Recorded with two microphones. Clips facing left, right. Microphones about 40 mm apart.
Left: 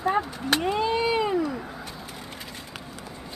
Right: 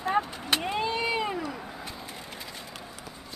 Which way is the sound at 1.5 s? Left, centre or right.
Centre.